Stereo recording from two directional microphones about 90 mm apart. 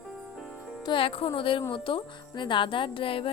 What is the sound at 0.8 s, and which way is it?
Speech, 70° left (ahead or behind).